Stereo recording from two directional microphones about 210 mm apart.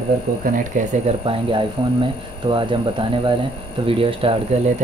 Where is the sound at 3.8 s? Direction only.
25° right (ahead or behind).